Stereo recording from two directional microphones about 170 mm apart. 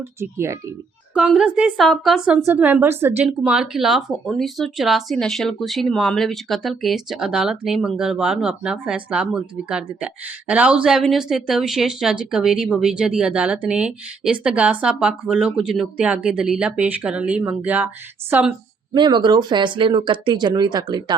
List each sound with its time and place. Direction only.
0.2 s speech: 15° right (ahead or behind)
18.9 s speech: 25° right (ahead or behind)